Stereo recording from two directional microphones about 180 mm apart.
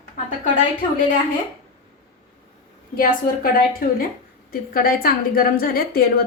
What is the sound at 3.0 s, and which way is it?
A woman's voice, 50° left (ahead or behind).